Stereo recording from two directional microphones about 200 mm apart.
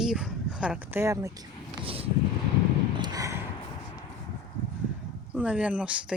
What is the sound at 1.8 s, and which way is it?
Vehicle, 30° right (ahead or behind).